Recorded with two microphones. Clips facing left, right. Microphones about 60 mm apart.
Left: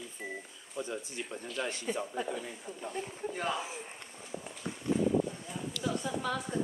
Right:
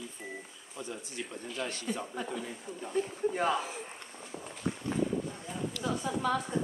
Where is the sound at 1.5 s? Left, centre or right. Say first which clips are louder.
Left 1 dB; centre.